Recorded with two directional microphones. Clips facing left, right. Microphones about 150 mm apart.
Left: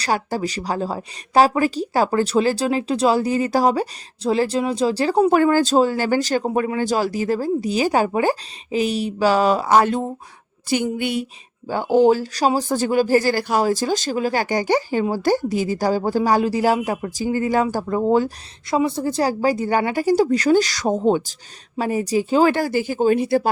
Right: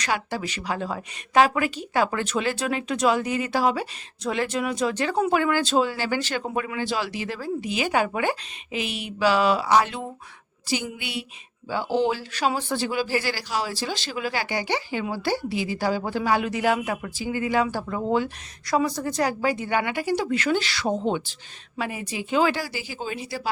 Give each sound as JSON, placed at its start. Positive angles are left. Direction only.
{"t": 0.0, "sound": "a woman's voice", "side_deg": 40}
{"t": 18.7, "sound": "a woman's voice", "side_deg": 25}